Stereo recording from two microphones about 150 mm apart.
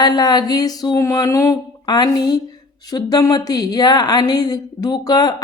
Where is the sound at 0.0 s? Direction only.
25° left (ahead or behind).